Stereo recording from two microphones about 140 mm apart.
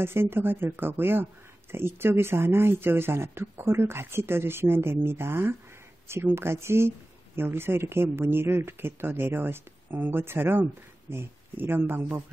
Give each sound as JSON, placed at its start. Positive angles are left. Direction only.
{"t": 0.0, "sound": "speech", "side_deg": -15}